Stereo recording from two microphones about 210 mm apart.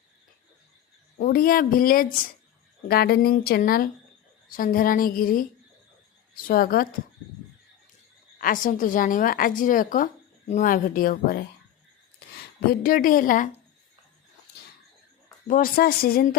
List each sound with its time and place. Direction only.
1.2 s a woman's voice: 45° left (ahead or behind)
8.4 s a woman's voice: 40° left (ahead or behind)
12.8 s a woman's voice: 40° left (ahead or behind)
15.4 s a woman's voice: 40° left (ahead or behind)